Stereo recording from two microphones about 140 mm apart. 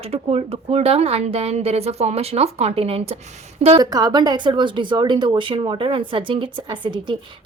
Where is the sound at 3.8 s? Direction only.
30° right (ahead or behind).